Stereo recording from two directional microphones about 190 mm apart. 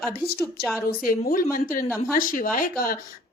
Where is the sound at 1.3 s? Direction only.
50° left (ahead or behind).